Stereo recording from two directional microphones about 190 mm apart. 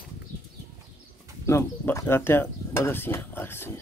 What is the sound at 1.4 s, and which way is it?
Speech, 15° left (ahead or behind).